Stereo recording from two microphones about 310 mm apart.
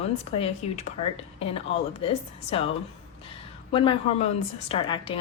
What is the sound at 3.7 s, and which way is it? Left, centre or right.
A woman's voice, centre.